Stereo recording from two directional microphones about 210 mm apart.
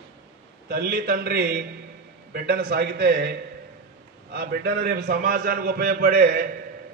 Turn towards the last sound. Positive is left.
turn(degrees=-45)  # may be behind; listen again after turning